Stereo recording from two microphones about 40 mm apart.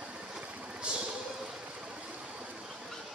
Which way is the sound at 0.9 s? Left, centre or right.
Right.